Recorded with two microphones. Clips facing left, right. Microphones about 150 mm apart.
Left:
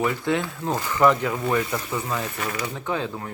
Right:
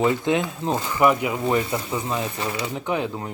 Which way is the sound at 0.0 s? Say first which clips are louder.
Right 3 dB; 20° right (ahead or behind).